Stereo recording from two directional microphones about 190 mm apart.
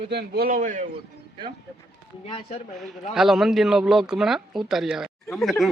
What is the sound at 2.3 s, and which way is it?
Speech, 25° left (ahead or behind).